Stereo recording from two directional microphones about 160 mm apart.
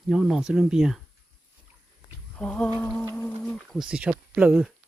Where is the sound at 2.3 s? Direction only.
5° left (ahead or behind).